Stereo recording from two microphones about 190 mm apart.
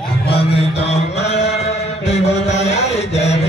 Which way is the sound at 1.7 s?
35° left (ahead or behind).